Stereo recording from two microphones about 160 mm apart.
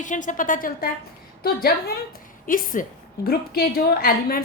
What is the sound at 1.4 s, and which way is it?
Speech, 70° left (ahead or behind).